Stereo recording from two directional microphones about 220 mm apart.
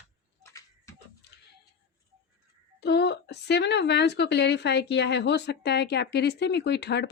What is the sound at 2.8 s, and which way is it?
A woman's voice, 50° left (ahead or behind).